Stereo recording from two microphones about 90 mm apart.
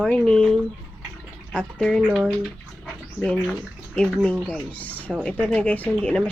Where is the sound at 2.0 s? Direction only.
10° right (ahead or behind).